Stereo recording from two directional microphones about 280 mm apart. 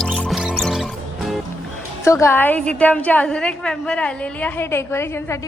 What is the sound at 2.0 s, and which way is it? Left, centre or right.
A woman's voice, centre.